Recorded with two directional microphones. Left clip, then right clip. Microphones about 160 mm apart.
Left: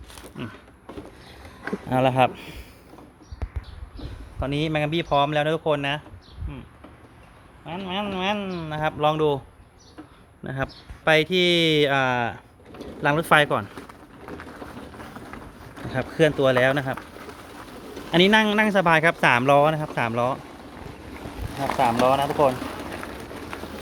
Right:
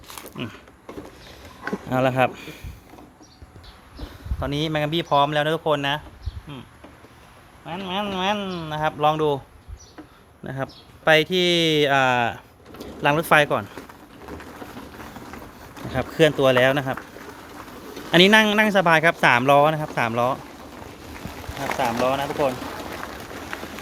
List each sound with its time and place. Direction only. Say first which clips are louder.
1.9 s speech: left 1 dB; 5° left (ahead or behind)
4.4 s speech: right 1 dB; centre (ahead or behind)
7.6 s speech: right 2 dB; 25° right (ahead or behind)
8.7 s speech: right 2 dB; centre (ahead or behind)
10.4 s speech: left 1 dB; centre (ahead or behind)
15.9 s speech: right 2 dB; 10° right (ahead or behind)
18.1 s speech: right 3 dB; 15° right (ahead or behind)
21.8 s speech: left 3 dB; 35° left (ahead or behind)